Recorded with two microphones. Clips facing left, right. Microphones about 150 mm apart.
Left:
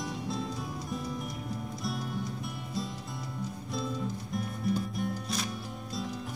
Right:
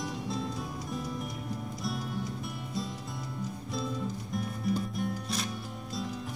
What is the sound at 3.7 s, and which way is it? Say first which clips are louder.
Music: even; centre (ahead or behind).